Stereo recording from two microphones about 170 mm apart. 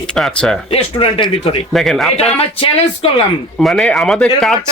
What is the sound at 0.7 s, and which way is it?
Speech, 30° left (ahead or behind).